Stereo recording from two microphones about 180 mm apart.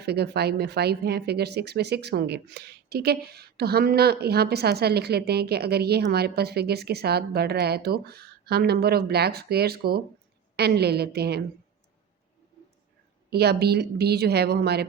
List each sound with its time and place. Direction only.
0.0 s speech: 65° right (ahead or behind)
13.3 s speech: 65° right (ahead or behind)